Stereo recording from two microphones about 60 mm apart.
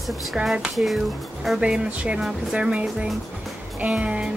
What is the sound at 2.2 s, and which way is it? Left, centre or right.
Speech, centre.